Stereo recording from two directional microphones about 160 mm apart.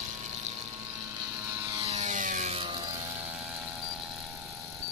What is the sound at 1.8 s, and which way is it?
Vehicle, 40° right (ahead or behind).